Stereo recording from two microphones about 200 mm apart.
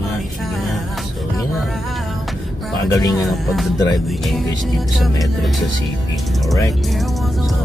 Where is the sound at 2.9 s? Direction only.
20° left (ahead or behind).